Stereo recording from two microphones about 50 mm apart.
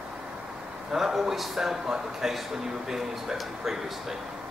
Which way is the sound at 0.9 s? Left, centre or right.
Centre.